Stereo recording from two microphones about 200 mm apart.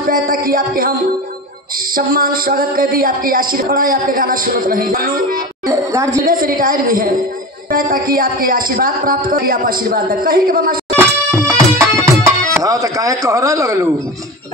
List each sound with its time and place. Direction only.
0.1 s speech: 45° right (ahead or behind)
2.0 s speech: 45° right (ahead or behind)
5.7 s speech: 15° right (ahead or behind)
6.2 s speech: 45° right (ahead or behind)
11.0 s music: 15° right (ahead or behind)
12.6 s speech: 15° right (ahead or behind)